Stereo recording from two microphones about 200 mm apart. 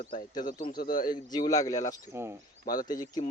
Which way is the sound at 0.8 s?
45° left (ahead or behind).